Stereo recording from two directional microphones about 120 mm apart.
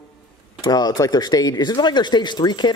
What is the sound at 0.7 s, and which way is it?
Speech, 30° left (ahead or behind).